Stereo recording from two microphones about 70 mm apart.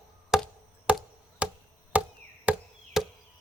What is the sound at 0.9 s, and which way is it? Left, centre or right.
Chop, centre.